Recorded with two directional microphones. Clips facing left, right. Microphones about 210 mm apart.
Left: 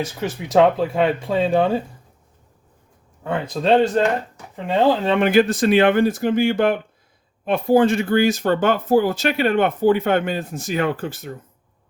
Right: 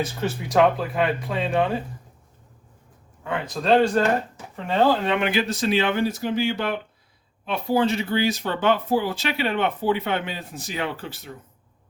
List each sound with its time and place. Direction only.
0.4 s speech: 25° left (ahead or behind)
3.2 s speech: 25° left (ahead or behind)
4.5 s speech: 15° left (ahead or behind)
5.0 s speech: 45° left (ahead or behind)